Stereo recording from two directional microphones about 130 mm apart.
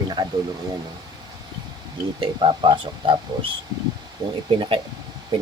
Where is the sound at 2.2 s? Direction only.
40° right (ahead or behind).